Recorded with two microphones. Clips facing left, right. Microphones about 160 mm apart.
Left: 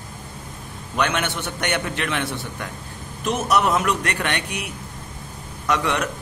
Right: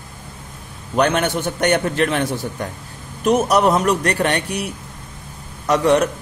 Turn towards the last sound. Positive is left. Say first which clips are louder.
# right 7 dB
turn(degrees=-35)  # may be behind; listen again after turning